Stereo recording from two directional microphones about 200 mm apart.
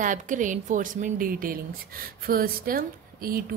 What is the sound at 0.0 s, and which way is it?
A woman's voice, 40° right (ahead or behind).